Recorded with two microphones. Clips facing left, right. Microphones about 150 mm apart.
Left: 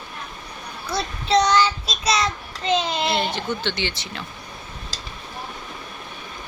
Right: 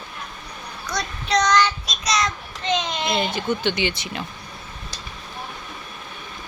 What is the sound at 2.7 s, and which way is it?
Speech, 35° left (ahead or behind).